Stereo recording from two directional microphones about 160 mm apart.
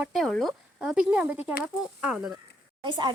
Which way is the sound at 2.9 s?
30° right (ahead or behind).